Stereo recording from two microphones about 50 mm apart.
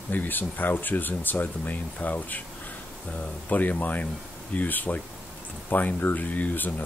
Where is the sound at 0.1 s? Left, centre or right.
Left.